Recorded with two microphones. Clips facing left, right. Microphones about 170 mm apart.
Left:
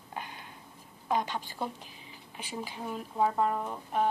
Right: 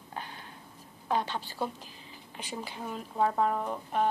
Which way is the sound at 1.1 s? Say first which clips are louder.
Even; 10° left (ahead or behind).